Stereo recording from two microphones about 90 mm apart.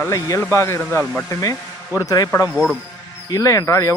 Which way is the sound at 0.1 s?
35° left (ahead or behind).